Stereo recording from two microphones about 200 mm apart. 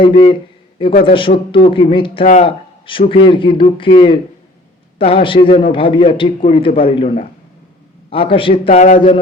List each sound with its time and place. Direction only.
0.0 s speech: 25° left (ahead or behind)
9.0 s speech: 25° left (ahead or behind)